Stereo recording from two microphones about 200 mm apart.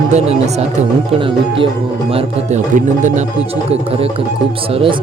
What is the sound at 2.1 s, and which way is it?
Speech, 35° right (ahead or behind).